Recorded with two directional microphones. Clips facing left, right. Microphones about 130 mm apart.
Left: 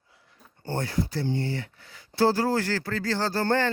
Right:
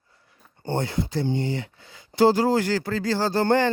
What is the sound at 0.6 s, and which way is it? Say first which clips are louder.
Speech: right 2 dB; 20° right (ahead or behind).